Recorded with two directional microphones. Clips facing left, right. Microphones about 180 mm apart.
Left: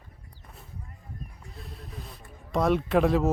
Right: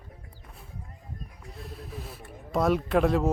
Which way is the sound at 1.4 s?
Centre (ahead or behind).